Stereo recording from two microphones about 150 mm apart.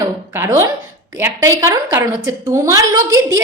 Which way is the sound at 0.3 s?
15° right (ahead or behind).